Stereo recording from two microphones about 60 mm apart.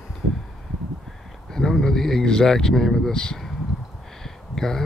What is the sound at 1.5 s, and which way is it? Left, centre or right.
Speech, centre.